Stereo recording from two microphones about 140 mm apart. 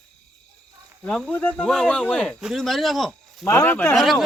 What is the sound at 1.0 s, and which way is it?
Speech, 10° left (ahead or behind).